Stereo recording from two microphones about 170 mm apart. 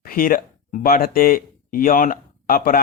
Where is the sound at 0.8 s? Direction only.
60° left (ahead or behind).